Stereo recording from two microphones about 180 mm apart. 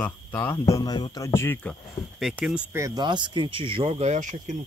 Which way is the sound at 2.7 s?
15° right (ahead or behind).